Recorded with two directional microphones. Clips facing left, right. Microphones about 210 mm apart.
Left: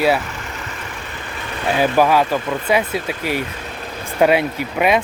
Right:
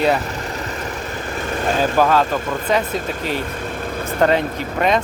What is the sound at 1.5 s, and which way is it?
Vehicle, 45° right (ahead or behind).